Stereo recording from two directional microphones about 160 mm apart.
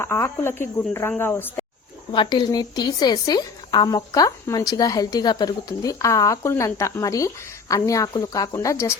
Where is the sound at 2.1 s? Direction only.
30° left (ahead or behind).